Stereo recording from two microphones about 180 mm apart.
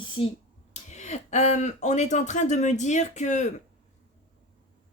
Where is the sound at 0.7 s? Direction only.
40° left (ahead or behind).